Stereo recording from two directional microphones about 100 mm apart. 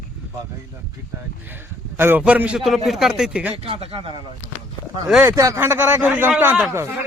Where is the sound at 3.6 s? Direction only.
65° right (ahead or behind).